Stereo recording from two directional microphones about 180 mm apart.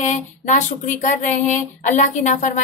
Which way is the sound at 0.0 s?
45° left (ahead or behind).